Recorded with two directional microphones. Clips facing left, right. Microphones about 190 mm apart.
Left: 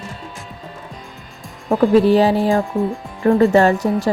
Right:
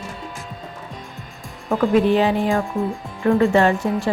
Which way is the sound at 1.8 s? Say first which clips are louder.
Left 4 dB; 35° left (ahead or behind).